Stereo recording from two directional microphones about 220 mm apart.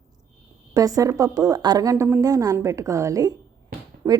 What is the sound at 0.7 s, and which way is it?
A woman's voice, 15° right (ahead or behind).